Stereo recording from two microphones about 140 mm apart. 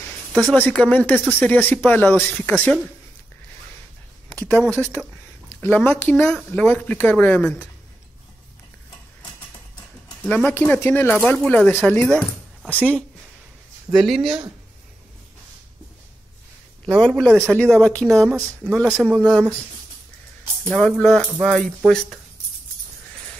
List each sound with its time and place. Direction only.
0.3 s speech: centre (ahead or behind)
0.6 s speech: 10° left (ahead or behind)
4.6 s speech: 15° left (ahead or behind)
10.2 s speech: 10° left (ahead or behind)
13.9 s speech: centre (ahead or behind)
17.0 s speech: 5° left (ahead or behind)
18.5 s speech: 15° right (ahead or behind)
18.8 s speech: 5° left (ahead or behind)
20.6 s speech: 5° left (ahead or behind)